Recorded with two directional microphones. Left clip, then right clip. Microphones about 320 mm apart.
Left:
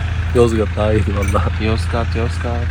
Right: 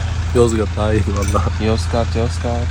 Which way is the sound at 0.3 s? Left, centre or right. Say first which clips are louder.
Left 1 dB; centre.